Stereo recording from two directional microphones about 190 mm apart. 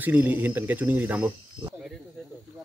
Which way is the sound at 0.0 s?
10° right (ahead or behind).